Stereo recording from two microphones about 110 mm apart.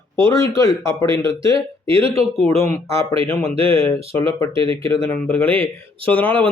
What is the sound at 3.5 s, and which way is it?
Speech, 60° right (ahead or behind).